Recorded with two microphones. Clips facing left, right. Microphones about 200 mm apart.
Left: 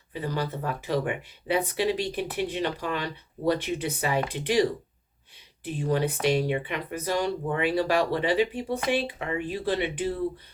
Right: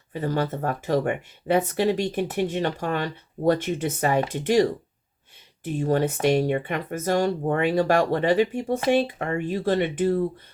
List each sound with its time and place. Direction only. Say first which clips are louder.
0.1 s speech: right 5 dB; 50° right (ahead or behind)
5.6 s speech: right 4 dB; 45° right (ahead or behind)